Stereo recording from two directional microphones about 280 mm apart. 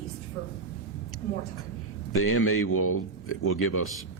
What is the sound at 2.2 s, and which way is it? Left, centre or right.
Speech, left.